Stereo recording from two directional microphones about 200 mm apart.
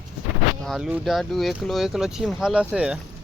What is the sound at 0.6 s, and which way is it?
Speech, centre (ahead or behind).